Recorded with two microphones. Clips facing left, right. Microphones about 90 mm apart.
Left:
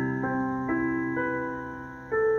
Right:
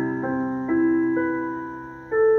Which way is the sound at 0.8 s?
40° right (ahead or behind).